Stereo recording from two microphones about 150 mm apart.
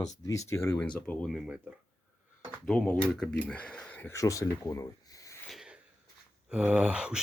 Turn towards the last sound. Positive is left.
turn(degrees=-5)  # may be behind; listen again after turning